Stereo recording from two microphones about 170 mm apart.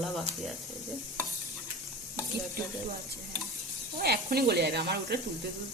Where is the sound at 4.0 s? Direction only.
65° right (ahead or behind).